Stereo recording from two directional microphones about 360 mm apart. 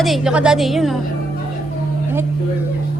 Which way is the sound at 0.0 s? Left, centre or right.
Centre.